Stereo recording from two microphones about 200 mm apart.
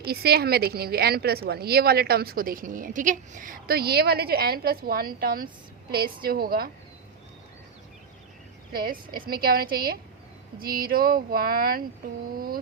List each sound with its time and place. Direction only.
0.0 s a woman's voice: 50° right (ahead or behind)
8.7 s a woman's voice: 45° right (ahead or behind)